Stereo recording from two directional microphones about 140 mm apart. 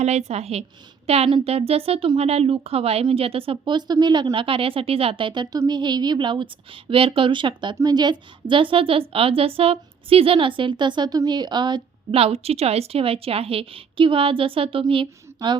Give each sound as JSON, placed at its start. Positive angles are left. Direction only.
{"t": 0.0, "sound": "a woman's voice", "side_deg": -50}